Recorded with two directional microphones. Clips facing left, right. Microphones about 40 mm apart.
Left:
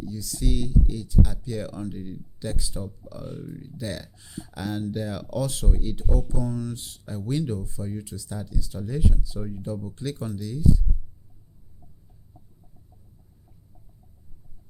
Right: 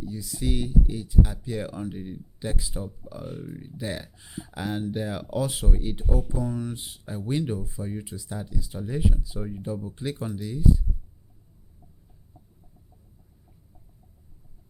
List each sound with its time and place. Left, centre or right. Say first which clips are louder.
0.0 s speech: even; right